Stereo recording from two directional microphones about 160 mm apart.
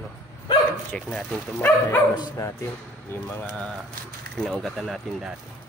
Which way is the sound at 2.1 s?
25° left (ahead or behind).